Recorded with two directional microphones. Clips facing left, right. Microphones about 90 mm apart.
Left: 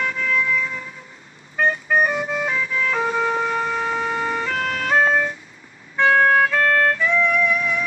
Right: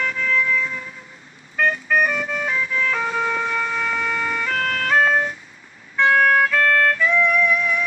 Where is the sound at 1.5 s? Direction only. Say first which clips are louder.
Even; 25° left (ahead or behind).